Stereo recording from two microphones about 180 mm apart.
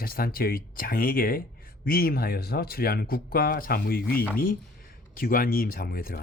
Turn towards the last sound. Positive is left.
turn(degrees=55)  # may be behind; listen again after turning